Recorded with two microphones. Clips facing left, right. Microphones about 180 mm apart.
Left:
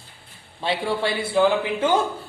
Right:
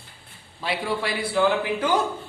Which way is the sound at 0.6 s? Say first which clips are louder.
Left 3 dB; 25° left (ahead or behind).